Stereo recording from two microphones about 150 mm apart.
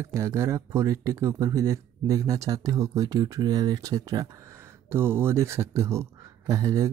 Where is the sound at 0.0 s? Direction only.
20° right (ahead or behind).